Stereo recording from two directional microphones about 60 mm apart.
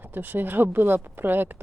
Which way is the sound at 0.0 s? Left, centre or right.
Right.